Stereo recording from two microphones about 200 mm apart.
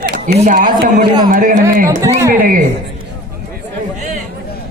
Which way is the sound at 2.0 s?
15° right (ahead or behind).